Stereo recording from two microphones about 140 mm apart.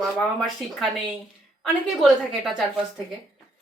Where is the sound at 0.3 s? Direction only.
Centre (ahead or behind).